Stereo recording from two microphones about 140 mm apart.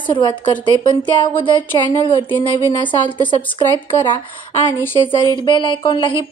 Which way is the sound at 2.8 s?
35° left (ahead or behind).